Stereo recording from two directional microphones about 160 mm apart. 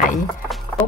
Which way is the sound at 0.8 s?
10° left (ahead or behind).